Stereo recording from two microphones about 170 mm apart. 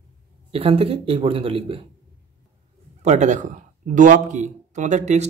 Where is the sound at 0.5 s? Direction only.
35° right (ahead or behind).